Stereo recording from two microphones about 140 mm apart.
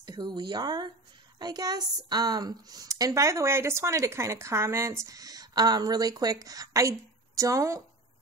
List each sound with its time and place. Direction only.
0.0 s a woman's voice: 30° right (ahead or behind)